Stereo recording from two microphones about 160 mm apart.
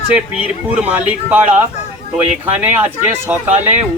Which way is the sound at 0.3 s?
5° right (ahead or behind).